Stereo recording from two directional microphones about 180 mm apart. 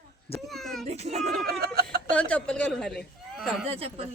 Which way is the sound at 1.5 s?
60° right (ahead or behind).